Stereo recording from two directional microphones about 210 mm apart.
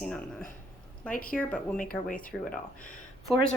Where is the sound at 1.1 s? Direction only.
45° left (ahead or behind).